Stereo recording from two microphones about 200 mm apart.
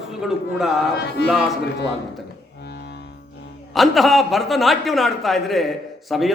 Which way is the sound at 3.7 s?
Centre (ahead or behind).